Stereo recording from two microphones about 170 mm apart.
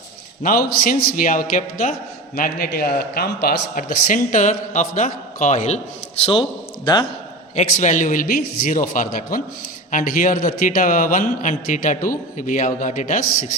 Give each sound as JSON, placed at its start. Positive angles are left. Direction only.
{"t": 0.4, "sound": "a man's voice", "side_deg": 55}
{"t": 6.8, "sound": "a man's voice", "side_deg": 30}
{"t": 7.5, "sound": "a man's voice", "side_deg": 45}